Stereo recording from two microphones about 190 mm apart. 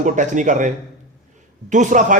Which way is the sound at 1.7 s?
40° right (ahead or behind).